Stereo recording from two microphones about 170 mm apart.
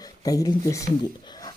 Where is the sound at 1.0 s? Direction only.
25° left (ahead or behind).